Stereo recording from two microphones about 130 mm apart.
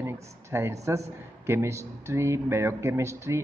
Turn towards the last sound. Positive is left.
turn(degrees=-20)  # may be behind; listen again after turning